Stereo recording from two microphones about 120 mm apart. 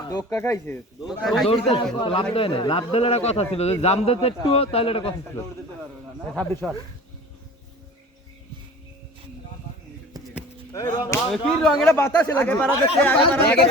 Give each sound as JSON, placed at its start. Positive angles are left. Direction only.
{"t": 0.1, "sound": "speech", "side_deg": 30}
{"t": 1.0, "sound": "speech", "side_deg": 0}
{"t": 1.5, "sound": "a man's voice", "side_deg": 55}
{"t": 6.4, "sound": "speech", "side_deg": 15}
{"t": 10.7, "sound": "speech", "side_deg": 30}
{"t": 11.3, "sound": "speech", "side_deg": 5}
{"t": 11.9, "sound": "speech", "side_deg": 20}